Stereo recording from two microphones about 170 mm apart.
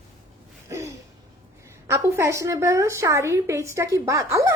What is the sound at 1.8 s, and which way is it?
A woman's voice, 15° right (ahead or behind).